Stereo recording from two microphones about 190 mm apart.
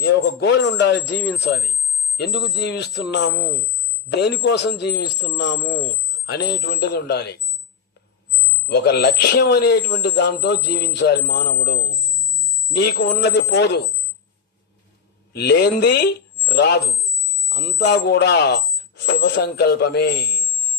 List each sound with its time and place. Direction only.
0.0 s a man's voice: 65° left (ahead or behind)
3.3 s speech: centre (ahead or behind)
3.8 s a man's voice: 60° left (ahead or behind)
5.5 s speech: 5° right (ahead or behind)
5.9 s speech: 60° left (ahead or behind)
8.6 s a man's voice: 60° left (ahead or behind)
15.3 s a man's voice: 60° left (ahead or behind)